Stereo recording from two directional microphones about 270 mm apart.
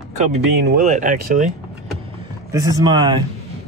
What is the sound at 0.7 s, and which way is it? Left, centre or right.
Speech, right.